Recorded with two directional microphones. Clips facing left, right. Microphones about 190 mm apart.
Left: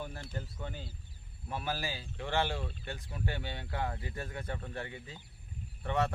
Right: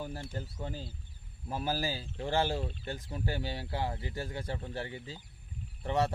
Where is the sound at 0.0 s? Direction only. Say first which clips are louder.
Right 2 dB; 35° right (ahead or behind).